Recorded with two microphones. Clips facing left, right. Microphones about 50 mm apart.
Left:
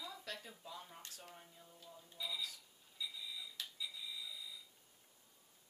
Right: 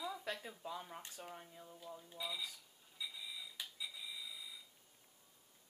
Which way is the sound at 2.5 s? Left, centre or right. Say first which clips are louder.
Even; centre.